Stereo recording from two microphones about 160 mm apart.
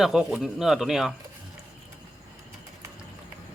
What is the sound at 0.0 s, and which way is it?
Speech, 5° right (ahead or behind).